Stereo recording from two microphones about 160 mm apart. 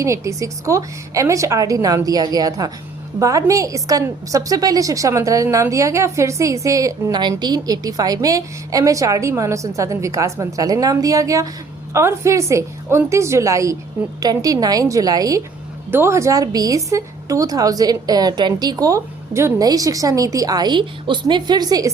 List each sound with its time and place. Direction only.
0.0 s a woman's voice: 20° right (ahead or behind)